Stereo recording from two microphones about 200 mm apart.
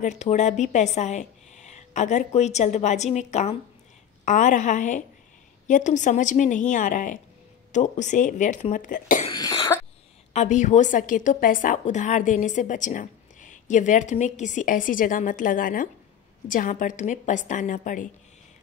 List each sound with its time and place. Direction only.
0.0 s a woman's voice: 35° left (ahead or behind)
9.3 s cough: 20° left (ahead or behind)
10.3 s a woman's voice: 35° left (ahead or behind)